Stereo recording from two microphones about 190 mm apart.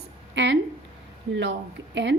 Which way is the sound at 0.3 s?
70° right (ahead or behind).